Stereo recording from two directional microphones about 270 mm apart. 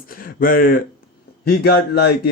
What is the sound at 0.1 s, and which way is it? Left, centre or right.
Speech, left.